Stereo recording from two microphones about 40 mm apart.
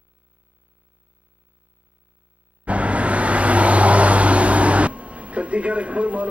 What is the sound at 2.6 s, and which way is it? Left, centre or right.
Vehicle, right.